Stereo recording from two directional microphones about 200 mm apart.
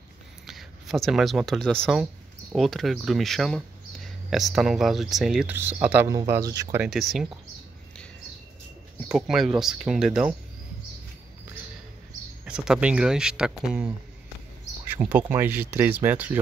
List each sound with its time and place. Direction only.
0.5 s speech: centre (ahead or behind); by 6.8 s 15° right (ahead or behind)
6.8 s speech: centre (ahead or behind)
9.1 s speech: 5° right (ahead or behind)
12.4 s speech: 5° right (ahead or behind)